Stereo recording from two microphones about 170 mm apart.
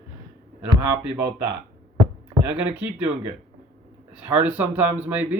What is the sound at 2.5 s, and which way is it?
Speech, 10° right (ahead or behind).